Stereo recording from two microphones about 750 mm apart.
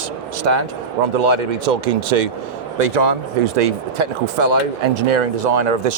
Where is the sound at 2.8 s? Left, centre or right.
Right.